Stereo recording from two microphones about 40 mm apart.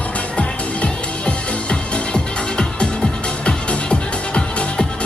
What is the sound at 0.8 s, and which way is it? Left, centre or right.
Music, left.